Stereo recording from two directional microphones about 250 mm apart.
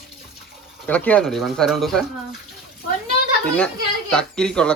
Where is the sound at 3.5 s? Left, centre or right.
Centre.